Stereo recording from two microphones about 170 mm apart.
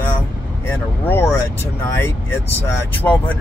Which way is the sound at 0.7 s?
10° left (ahead or behind).